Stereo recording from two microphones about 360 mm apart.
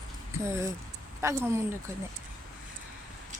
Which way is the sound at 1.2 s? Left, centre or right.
Centre.